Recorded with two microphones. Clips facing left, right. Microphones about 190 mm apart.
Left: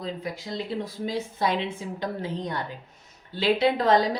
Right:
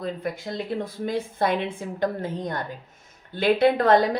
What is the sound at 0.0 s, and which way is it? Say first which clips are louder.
A woman's voice: right 3 dB; 55° right (ahead or behind).